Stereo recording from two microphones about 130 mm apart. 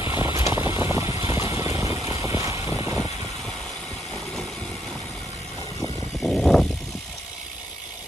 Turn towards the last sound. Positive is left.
turn(degrees=0)  # may be behind; listen again after turning